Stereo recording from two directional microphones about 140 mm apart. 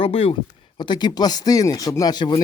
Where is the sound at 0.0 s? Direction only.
40° left (ahead or behind).